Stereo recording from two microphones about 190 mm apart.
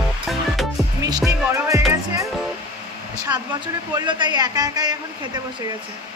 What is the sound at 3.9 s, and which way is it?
A man's voice, 25° right (ahead or behind).